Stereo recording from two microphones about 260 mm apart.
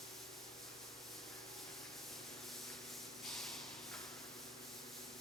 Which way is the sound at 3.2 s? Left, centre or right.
Centre.